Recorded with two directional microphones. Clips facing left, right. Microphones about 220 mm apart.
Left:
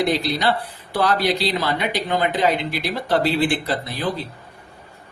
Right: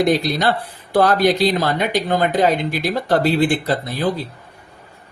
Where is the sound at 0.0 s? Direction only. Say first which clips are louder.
Right 3 dB; 45° right (ahead or behind).